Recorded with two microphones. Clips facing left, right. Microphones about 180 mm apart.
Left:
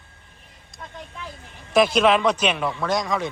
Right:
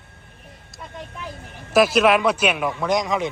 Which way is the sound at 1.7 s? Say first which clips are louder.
Right 1 dB; 5° right (ahead or behind).